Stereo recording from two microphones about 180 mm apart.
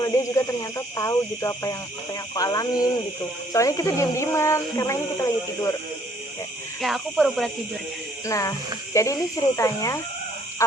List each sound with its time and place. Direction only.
0.0 s speech: 15° left (ahead or behind)
6.8 s speech: centre (ahead or behind)
8.3 s speech: 15° left (ahead or behind)